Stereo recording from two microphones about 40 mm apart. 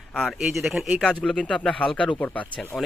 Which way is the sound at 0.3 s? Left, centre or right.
Centre.